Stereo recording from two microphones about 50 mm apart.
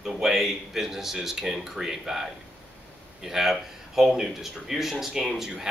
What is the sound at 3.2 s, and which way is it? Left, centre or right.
A man's voice, centre.